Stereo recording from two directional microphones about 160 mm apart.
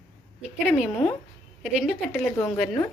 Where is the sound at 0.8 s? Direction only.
5° left (ahead or behind).